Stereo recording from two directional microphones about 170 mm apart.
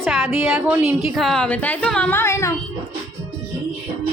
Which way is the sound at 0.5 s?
5° right (ahead or behind).